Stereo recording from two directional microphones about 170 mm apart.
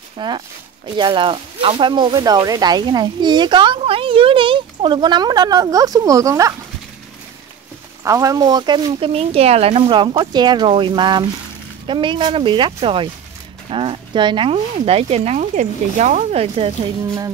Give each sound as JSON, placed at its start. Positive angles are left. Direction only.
{"t": 0.2, "sound": "speech", "side_deg": -25}
{"t": 8.0, "sound": "speech", "side_deg": -20}